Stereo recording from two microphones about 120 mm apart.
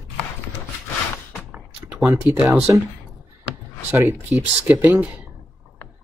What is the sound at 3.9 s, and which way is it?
Speech, 25° right (ahead or behind).